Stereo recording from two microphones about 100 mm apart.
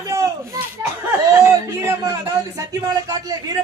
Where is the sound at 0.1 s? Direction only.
30° right (ahead or behind).